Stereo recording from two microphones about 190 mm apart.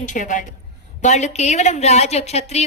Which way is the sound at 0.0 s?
40° left (ahead or behind).